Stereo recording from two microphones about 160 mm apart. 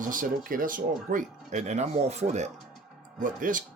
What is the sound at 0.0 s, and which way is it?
Speech, 60° right (ahead or behind).